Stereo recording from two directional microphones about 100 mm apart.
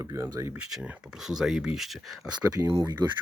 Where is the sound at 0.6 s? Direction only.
10° right (ahead or behind).